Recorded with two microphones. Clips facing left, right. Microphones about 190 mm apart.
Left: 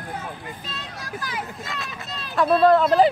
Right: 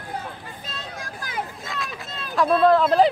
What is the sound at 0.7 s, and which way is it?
Vehicle, 50° right (ahead or behind).